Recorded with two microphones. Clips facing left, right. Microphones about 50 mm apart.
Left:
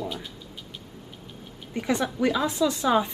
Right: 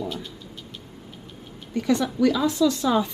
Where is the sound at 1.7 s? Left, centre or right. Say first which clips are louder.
Right 3 dB; left.